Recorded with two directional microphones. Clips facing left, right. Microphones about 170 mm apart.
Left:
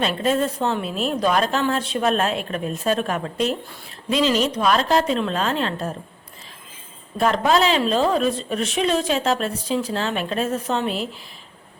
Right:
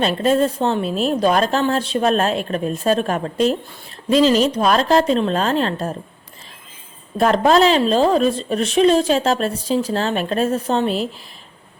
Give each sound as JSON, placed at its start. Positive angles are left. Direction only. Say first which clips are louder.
{"t": 0.0, "sound": "a woman's voice", "louder": "right 4 dB", "side_deg": -35}
{"t": 7.2, "sound": "a woman's voice", "louder": "right 4 dB", "side_deg": -40}